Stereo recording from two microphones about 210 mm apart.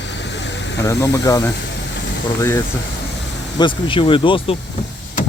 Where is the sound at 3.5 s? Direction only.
25° left (ahead or behind).